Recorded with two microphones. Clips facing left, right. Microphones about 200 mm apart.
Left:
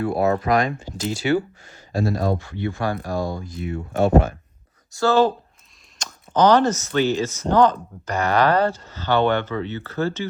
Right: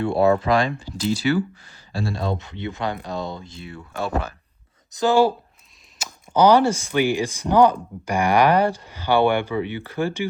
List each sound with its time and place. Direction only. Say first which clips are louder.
0.0 s speech: right 2 dB; 25° right (ahead or behind)
1.2 s speech: left 2 dB; 40° left (ahead or behind)
1.6 s speech: left 5 dB; 35° right (ahead or behind)
3.8 s speech: left 9 dB; 40° left (ahead or behind)
4.9 s speech: even; 15° right (ahead or behind)
6.0 s chop: even; 5° right (ahead or behind)
6.3 s speech: right 1 dB; 10° right (ahead or behind)